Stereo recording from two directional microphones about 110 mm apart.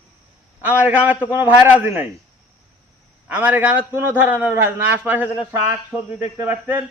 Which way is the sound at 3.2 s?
15° right (ahead or behind).